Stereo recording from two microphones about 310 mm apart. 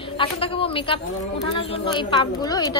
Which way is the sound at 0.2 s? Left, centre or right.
Centre.